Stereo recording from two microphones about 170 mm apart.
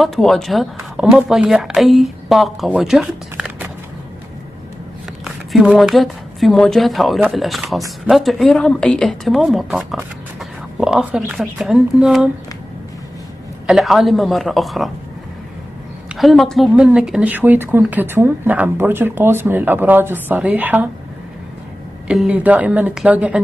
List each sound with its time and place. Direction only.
0.0 s speech: centre (ahead or behind)
5.2 s speech: centre (ahead or behind)
13.7 s speech: centre (ahead or behind)
16.1 s speech: centre (ahead or behind)
22.0 s speech: 5° right (ahead or behind)